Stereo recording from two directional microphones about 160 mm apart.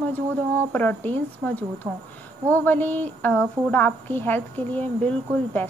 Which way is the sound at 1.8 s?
15° right (ahead or behind).